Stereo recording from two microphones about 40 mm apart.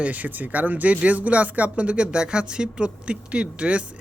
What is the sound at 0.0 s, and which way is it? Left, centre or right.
Speech, right.